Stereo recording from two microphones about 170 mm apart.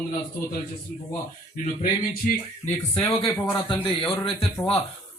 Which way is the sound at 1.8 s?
50° left (ahead or behind).